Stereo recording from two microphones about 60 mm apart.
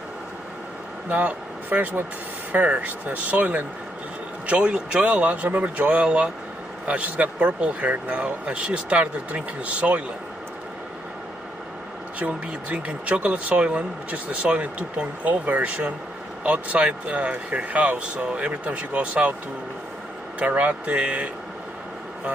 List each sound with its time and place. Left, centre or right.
1.0 s speech: right
12.2 s speech: right
20.3 s speech: right